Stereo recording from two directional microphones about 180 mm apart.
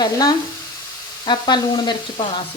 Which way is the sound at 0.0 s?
20° left (ahead or behind).